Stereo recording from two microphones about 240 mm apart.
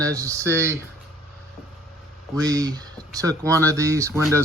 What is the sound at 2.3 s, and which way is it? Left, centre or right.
Speech, centre.